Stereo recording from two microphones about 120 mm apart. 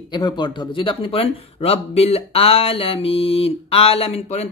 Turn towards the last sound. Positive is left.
turn(degrees=60)  # may be behind; listen again after turning